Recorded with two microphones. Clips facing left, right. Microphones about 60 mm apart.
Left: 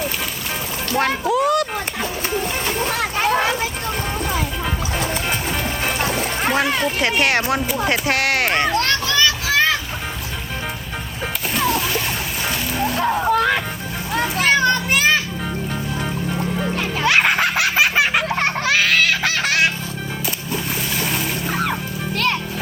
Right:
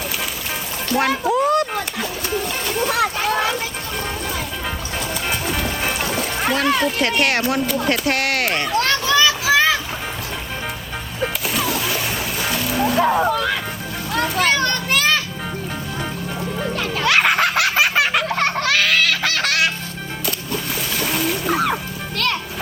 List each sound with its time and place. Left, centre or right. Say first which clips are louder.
0.9 s speech: right 1 dB; centre
2.3 s splash: right 1 dB; centre
3.2 s a sound: left 2 dB; centre
4.4 s music: left 3 dB; centre
6.5 s speech: right 2 dB; centre
11.2 s splash: even; centre
13.3 s speech: left 4 dB; left
14.1 s children playing: left 1 dB; centre
16.7 s music: even; centre
22.1 s music: left 1 dB; centre